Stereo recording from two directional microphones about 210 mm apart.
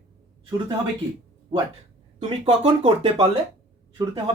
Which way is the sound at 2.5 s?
30° right (ahead or behind).